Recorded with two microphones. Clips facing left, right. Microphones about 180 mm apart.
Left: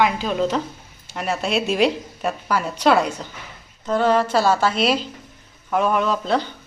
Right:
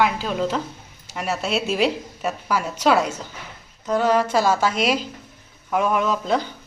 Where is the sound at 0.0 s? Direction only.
5° right (ahead or behind).